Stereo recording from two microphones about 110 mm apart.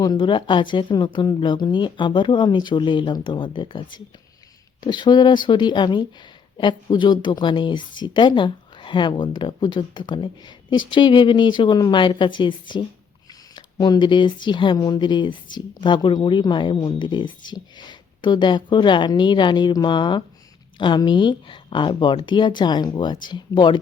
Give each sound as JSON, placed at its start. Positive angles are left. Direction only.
{"t": 0.0, "sound": "speech", "side_deg": 40}